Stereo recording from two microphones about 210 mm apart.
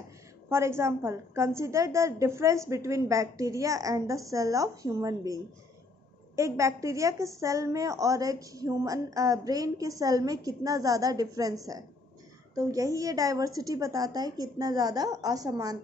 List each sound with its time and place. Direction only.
0.5 s a woman's voice: 10° right (ahead or behind)
12.5 s a woman's voice: 15° right (ahead or behind)